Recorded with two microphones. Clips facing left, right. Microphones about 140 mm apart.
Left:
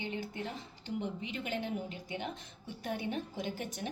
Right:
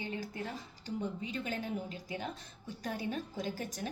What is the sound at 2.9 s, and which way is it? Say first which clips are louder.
Speech: left 1 dB; 20° left (ahead or behind).